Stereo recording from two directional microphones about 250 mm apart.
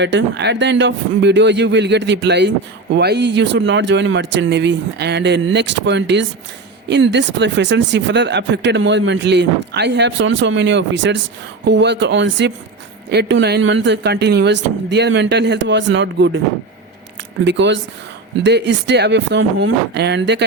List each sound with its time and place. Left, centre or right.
0.0 s speech: right
17.4 s speech: right